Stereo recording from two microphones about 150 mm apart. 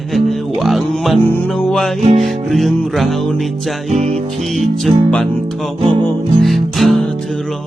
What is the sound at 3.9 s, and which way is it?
Music, 50° right (ahead or behind).